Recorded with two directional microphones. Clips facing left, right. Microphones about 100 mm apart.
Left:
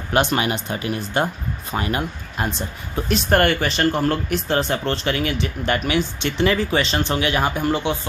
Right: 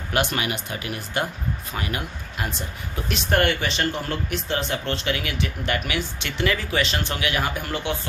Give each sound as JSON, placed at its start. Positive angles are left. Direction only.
{"t": 0.1, "sound": "speech", "side_deg": 30}